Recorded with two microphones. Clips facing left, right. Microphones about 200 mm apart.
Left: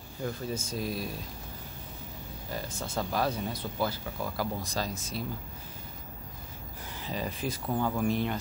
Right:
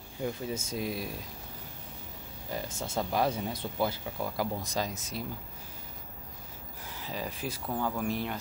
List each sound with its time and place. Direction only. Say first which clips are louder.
0.2 s speech: even; 15° right (ahead or behind)
2.5 s speech: right 1 dB; 20° right (ahead or behind)
6.9 s speech: left 2 dB; 5° right (ahead or behind)
7.6 s speech: left 3 dB; 5° left (ahead or behind)